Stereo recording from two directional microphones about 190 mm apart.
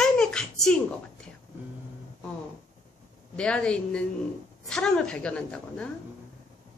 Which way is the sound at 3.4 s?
5° left (ahead or behind).